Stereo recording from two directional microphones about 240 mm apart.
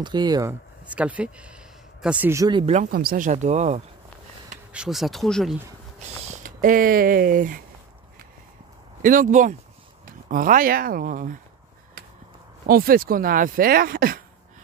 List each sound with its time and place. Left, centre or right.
0.0 s speech: centre
4.7 s speech: centre
6.4 s speech: right
9.0 s speech: right
12.6 s speech: right